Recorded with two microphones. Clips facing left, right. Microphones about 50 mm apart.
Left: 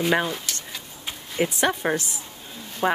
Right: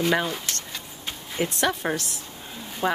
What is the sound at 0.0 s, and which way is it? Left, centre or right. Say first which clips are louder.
Speech: left 1 dB; centre.